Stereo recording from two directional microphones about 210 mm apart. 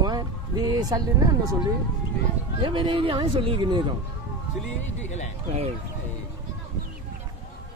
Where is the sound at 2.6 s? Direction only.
25° right (ahead or behind).